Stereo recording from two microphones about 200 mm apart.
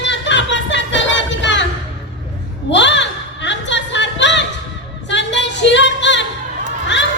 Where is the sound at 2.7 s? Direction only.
65° left (ahead or behind).